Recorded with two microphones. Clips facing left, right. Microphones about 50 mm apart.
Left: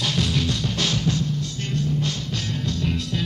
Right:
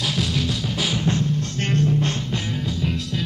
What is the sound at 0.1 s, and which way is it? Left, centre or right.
Music, centre.